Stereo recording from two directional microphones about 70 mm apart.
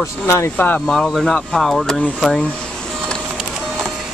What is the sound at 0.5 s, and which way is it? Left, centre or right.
Speech, left.